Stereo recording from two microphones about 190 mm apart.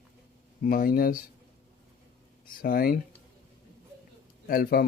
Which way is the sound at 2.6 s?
50° left (ahead or behind).